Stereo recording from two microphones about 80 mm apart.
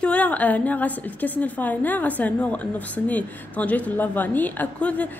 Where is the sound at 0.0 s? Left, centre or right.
Centre.